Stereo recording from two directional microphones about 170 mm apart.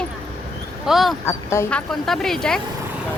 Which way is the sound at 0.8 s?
Centre (ahead or behind).